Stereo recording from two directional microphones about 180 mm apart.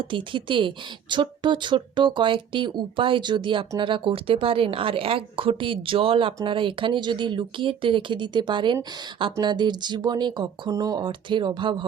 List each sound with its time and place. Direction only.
0.0 s speech: 30° right (ahead or behind)